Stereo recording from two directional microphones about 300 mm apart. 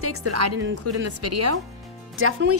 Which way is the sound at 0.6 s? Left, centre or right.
Right.